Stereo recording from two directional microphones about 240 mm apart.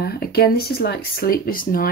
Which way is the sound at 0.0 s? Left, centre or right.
Left.